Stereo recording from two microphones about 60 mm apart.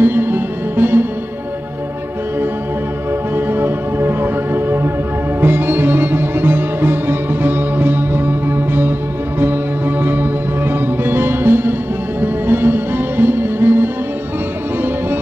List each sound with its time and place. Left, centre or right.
0.0 s music: right
3.3 s music: right